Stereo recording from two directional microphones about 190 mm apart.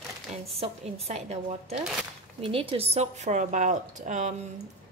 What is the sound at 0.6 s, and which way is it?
A woman's voice, 30° right (ahead or behind).